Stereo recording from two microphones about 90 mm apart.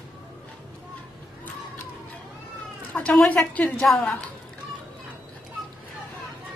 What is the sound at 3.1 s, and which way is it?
Speech, 10° left (ahead or behind).